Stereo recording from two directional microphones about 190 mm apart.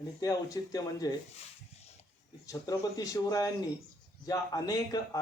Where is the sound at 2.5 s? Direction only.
20° left (ahead or behind).